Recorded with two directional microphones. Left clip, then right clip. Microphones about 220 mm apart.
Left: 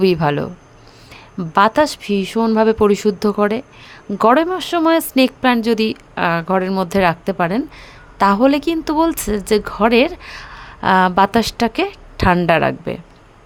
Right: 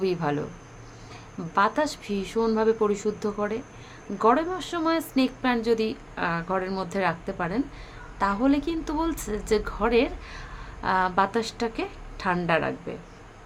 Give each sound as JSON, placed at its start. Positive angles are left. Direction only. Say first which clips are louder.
{"t": 0.0, "sound": "speech", "louder": "left 11 dB", "side_deg": 45}